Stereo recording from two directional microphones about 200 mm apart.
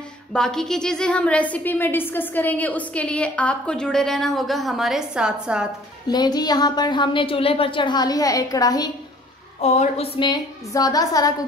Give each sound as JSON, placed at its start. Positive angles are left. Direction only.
{"t": 0.3, "sound": "a woman's voice", "side_deg": 5}
{"t": 6.0, "sound": "a woman's voice", "side_deg": 20}
{"t": 9.6, "sound": "a woman's voice", "side_deg": 35}